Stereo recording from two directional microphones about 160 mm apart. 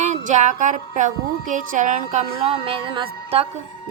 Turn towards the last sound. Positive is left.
turn(degrees=-35)  # may be behind; listen again after turning